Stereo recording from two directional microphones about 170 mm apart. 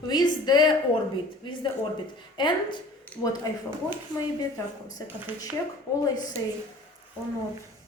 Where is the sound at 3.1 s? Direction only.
10° left (ahead or behind).